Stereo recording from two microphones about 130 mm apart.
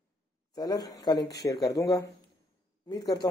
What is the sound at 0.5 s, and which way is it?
A man's voice, 30° left (ahead or behind).